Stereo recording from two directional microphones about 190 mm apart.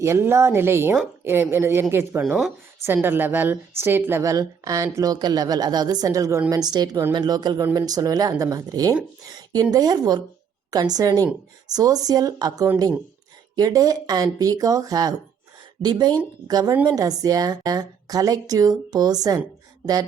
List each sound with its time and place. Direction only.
0.0 s a woman's voice: 15° right (ahead or behind)
2.2 s a woman's voice: centre (ahead or behind); by 9.0 s 20° right (ahead or behind)
9.2 s a sound: 20° right (ahead or behind)
9.7 s a woman's voice: 20° right (ahead or behind)